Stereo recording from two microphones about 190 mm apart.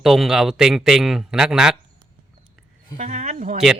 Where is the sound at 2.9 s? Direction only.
40° right (ahead or behind).